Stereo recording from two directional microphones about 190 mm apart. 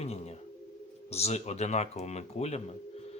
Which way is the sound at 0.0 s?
35° left (ahead or behind).